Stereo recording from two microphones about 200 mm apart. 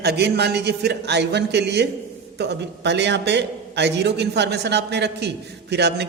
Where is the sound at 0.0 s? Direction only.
55° right (ahead or behind).